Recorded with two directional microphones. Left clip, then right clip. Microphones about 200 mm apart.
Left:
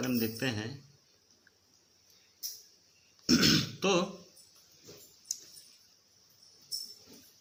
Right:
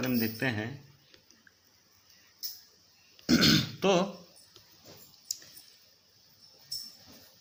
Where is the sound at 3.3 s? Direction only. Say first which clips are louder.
Right 2 dB; 25° right (ahead or behind).